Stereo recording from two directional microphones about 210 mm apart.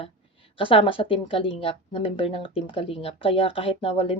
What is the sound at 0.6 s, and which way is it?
Speech, 25° left (ahead or behind).